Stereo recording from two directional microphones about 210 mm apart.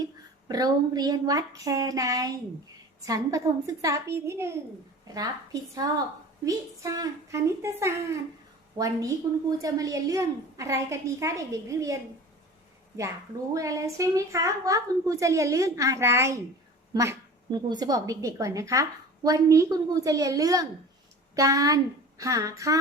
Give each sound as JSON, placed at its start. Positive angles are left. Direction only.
{"t": 0.4, "sound": "a woman's voice", "side_deg": -20}
{"t": 13.5, "sound": "a woman's voice", "side_deg": -15}